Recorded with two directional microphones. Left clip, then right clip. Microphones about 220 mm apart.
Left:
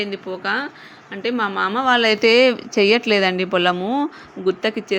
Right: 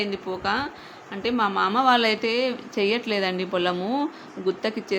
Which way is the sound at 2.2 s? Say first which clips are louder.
Left 11 dB; 30° left (ahead or behind).